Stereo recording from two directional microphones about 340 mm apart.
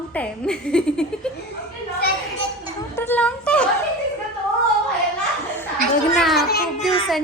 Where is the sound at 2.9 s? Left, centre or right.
Centre.